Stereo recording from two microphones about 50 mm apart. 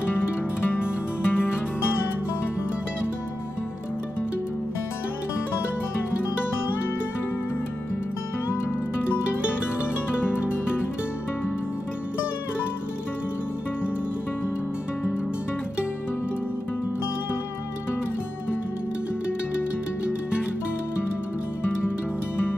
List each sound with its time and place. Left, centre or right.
0.7 s music: left